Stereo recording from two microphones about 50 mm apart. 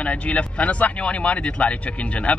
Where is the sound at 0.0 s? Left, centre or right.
Left.